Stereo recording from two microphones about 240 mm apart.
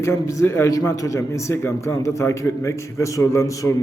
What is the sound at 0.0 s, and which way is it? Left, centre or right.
A man's voice, centre.